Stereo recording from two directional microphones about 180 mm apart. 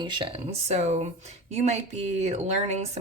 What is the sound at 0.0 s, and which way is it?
Speech, 25° right (ahead or behind).